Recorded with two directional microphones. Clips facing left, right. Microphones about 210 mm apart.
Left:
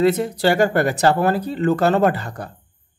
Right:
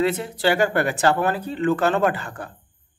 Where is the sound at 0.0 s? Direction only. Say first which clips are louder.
Left 4 dB; 40° left (ahead or behind).